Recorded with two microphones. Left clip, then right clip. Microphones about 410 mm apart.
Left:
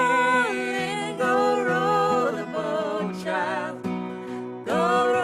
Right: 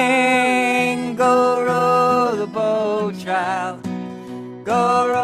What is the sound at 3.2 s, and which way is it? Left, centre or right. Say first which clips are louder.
Music: right 4 dB; right.